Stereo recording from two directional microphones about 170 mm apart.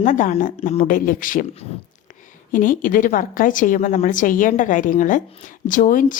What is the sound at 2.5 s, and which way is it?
A woman's voice, 55° left (ahead or behind).